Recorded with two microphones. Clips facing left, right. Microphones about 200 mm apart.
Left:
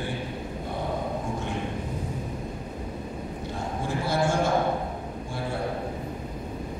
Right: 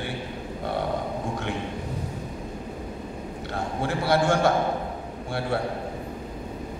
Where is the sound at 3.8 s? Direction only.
70° right (ahead or behind).